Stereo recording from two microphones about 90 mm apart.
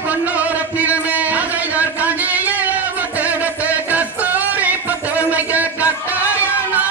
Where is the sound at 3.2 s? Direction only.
15° right (ahead or behind).